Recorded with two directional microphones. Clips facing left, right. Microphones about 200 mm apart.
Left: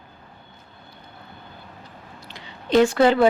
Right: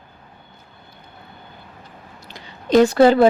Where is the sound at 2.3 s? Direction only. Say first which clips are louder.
Right 3 dB; 40° right (ahead or behind).